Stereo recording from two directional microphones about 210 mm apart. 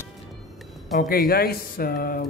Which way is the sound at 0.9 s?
45° left (ahead or behind).